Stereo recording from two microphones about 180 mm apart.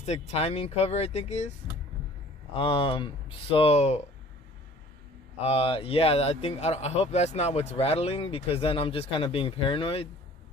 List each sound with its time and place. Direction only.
0.0 s speech: 35° left (ahead or behind)
2.5 s speech: 30° left (ahead or behind)
5.4 s speech: 35° left (ahead or behind)